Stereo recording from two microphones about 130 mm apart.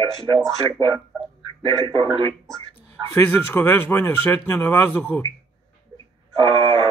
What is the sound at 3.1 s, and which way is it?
Speech, 20° left (ahead or behind).